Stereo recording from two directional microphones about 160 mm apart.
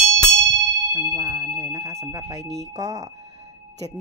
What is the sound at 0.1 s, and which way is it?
Clang, 20° right (ahead or behind).